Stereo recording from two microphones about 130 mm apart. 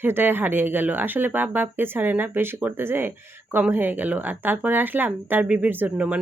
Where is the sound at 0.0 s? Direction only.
15° right (ahead or behind).